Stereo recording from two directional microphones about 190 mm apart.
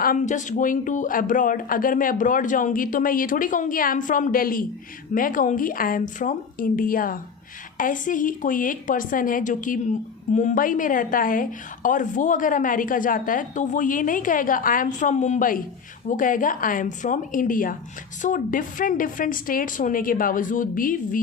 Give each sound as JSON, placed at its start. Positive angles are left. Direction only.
{"t": 0.0, "sound": "a woman's voice", "side_deg": 45}